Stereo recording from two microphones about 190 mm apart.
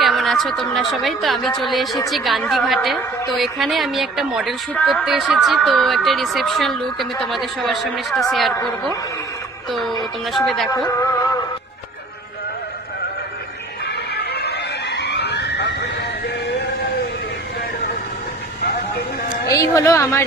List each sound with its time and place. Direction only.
0.0 s a woman's voice: centre (ahead or behind)
10.0 s a woman's voice: centre (ahead or behind)
13.8 s music: 60° left (ahead or behind)
19.5 s speech: 15° left (ahead or behind)